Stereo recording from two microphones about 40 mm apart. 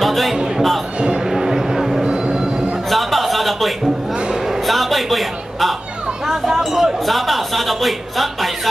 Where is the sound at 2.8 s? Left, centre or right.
Centre.